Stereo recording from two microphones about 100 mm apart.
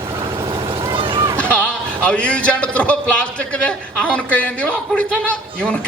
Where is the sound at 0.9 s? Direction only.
60° right (ahead or behind).